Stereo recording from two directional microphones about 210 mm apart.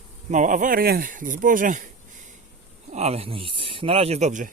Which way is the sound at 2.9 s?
30° right (ahead or behind).